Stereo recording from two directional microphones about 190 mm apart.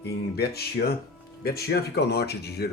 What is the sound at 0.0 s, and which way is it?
Speech, 55° left (ahead or behind).